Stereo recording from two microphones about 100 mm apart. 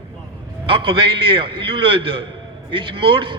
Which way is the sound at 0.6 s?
60° right (ahead or behind).